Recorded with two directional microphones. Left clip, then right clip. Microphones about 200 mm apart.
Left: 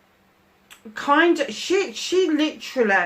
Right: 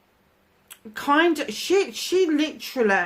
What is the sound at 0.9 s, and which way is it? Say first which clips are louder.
Speech: left 2 dB; 50° right (ahead or behind).